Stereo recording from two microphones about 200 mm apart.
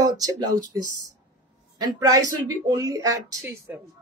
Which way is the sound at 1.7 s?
20° right (ahead or behind).